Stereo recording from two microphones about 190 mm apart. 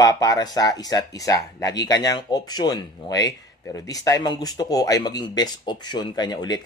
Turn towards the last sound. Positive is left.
turn(degrees=20)  # may be behind; listen again after turning